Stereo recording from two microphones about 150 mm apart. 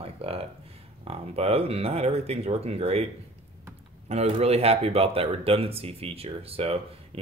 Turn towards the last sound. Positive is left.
turn(degrees=-40)  # may be behind; listen again after turning